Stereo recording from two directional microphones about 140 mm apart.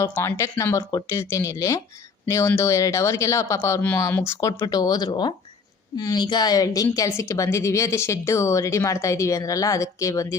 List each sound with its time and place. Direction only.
0.2 s speech: 20° left (ahead or behind)